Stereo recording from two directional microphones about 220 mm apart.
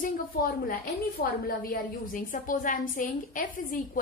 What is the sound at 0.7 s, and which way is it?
A woman's voice, 40° left (ahead or behind).